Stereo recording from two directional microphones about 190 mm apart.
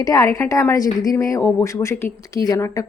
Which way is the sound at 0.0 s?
15° left (ahead or behind).